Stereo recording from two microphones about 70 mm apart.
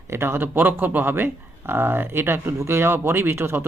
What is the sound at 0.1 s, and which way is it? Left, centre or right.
Speech, right.